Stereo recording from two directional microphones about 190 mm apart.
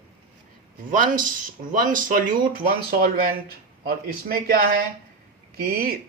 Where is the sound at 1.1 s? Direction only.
45° right (ahead or behind).